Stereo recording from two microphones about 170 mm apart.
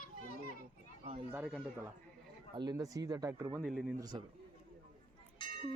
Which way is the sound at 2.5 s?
20° right (ahead or behind).